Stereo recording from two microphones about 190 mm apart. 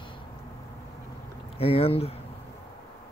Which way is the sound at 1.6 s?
30° left (ahead or behind).